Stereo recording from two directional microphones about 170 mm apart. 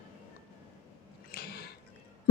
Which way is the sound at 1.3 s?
65° left (ahead or behind).